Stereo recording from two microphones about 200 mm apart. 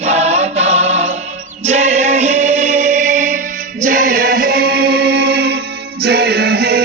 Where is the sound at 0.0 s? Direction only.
35° right (ahead or behind).